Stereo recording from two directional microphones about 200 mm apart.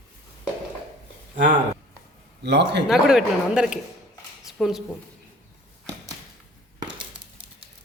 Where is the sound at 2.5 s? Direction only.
60° right (ahead or behind).